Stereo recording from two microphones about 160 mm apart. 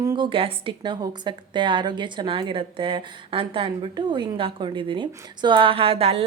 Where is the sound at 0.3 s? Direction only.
35° right (ahead or behind).